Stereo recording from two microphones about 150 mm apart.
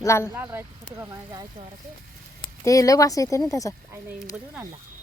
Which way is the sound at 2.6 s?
20° left (ahead or behind).